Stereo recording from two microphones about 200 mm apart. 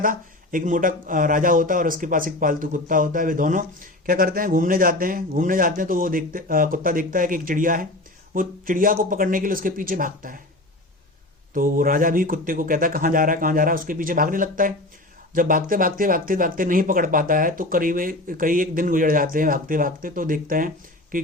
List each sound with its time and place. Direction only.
0.0 s a man's voice: 45° right (ahead or behind)
11.5 s a man's voice: 45° right (ahead or behind)